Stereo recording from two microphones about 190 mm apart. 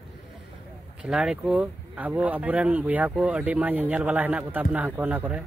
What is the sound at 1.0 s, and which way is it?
Speech, 5° right (ahead or behind).